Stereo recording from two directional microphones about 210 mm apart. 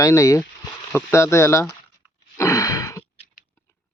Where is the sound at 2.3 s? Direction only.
15° left (ahead or behind).